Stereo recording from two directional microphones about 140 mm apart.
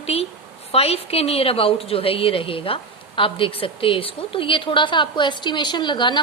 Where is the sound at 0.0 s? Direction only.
45° left (ahead or behind).